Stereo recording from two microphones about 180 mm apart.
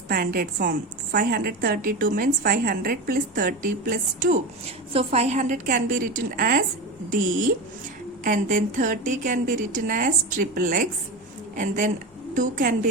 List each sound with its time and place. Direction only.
0.1 s a woman's voice: 55° right (ahead or behind)
4.9 s a woman's voice: 35° right (ahead or behind); by 6.7 s 50° right (ahead or behind)
8.2 s a woman's voice: 45° right (ahead or behind)